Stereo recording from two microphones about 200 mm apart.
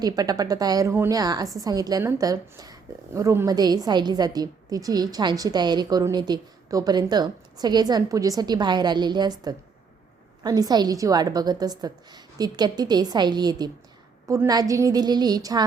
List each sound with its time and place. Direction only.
0.0 s a woman's voice: 20° right (ahead or behind)